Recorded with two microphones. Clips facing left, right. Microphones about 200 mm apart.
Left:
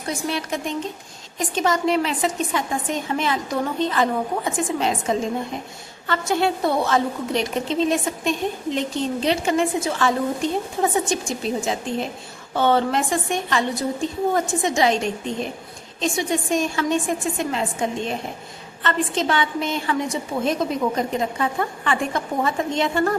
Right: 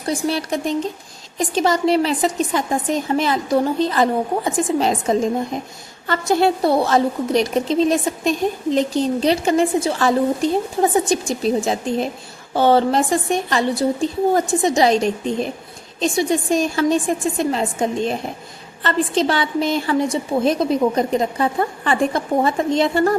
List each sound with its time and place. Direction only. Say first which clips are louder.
0.3 s a woman's voice: right 4 dB; 35° right (ahead or behind)